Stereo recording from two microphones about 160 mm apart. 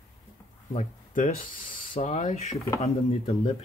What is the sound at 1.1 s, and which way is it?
Speech, 55° left (ahead or behind).